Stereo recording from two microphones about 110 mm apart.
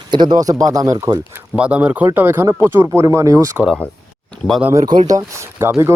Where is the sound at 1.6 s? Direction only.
10° right (ahead or behind); by 3.5 s 30° right (ahead or behind).